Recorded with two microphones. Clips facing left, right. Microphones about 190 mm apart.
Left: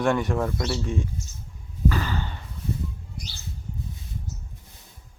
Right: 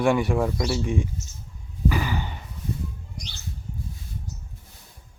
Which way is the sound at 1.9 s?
15° right (ahead or behind).